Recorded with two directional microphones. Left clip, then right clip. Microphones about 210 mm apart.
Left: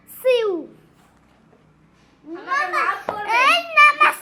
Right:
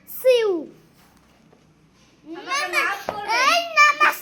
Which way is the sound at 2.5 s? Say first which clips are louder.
Left 2 dB; 30° right (ahead or behind).